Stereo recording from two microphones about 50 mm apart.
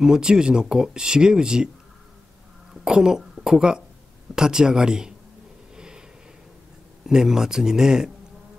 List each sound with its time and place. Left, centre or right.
0.0 s speech: centre
2.7 s a woman's voice: centre
5.8 s a sound: centre
7.1 s speech: centre